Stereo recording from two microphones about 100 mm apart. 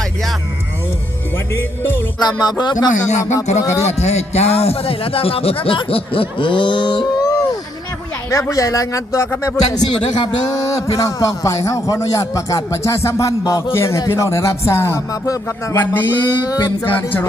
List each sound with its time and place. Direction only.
2.1 s speech: 45° left (ahead or behind)
3.0 s music: 30° left (ahead or behind)
3.6 s a man's voice: 30° left (ahead or behind)
3.8 s a man's voice: 90° left; by 7.3 s 50° left (ahead or behind)
8.3 s a man's voice: 35° left (ahead or behind)
9.8 s a man's voice: 45° left (ahead or behind)
13.7 s music: 30° left (ahead or behind)
16.5 s a man's voice: 40° left (ahead or behind)